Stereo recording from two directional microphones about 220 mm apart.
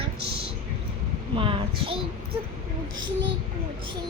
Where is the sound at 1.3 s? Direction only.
25° right (ahead or behind).